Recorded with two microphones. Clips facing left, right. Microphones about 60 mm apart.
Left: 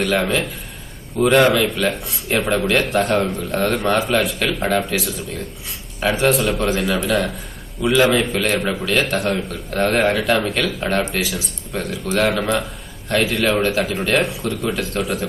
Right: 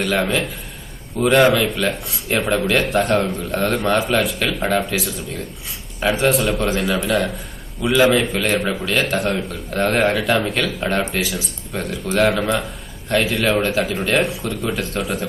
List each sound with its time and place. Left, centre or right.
0.0 s speech: centre